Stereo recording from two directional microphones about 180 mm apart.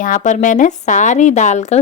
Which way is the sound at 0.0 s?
45° left (ahead or behind).